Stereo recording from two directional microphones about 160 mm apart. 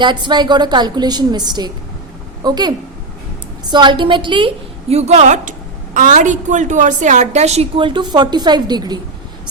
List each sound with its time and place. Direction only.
0.0 s a woman's voice: 30° right (ahead or behind)